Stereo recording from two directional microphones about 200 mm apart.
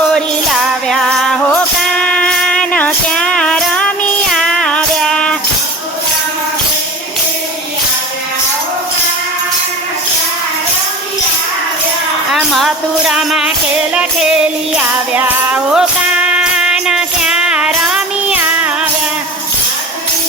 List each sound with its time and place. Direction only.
0.1 s music: centre (ahead or behind)
12.3 s music: centre (ahead or behind)